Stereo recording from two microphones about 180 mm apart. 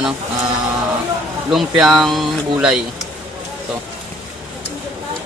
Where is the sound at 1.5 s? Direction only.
Centre (ahead or behind).